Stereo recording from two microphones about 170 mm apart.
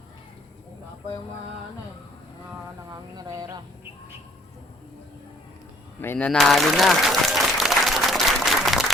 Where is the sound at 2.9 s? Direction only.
20° right (ahead or behind).